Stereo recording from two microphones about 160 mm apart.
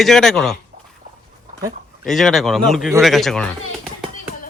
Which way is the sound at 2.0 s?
Centre (ahead or behind).